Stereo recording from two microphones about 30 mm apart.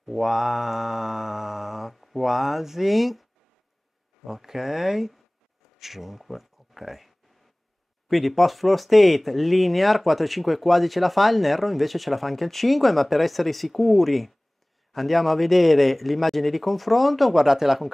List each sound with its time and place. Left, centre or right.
0.0 s mantra: centre
4.3 s speech: centre
8.1 s speech: centre
17.3 s speech: centre